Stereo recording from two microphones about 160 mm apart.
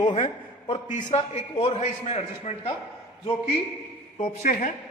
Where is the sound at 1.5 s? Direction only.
35° left (ahead or behind).